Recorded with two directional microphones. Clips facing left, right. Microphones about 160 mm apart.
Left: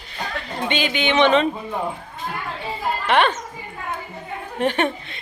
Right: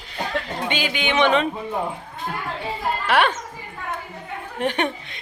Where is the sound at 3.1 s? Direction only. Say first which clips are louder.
Left 1 dB; 10° right (ahead or behind).